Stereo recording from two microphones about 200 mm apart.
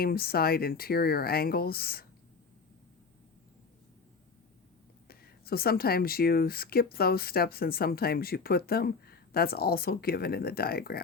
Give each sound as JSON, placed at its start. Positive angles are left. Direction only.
{"t": 0.0, "sound": "speech", "side_deg": 50}
{"t": 5.0, "sound": "speech", "side_deg": 50}